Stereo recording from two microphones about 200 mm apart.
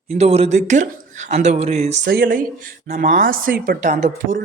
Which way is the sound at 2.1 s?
45° right (ahead or behind).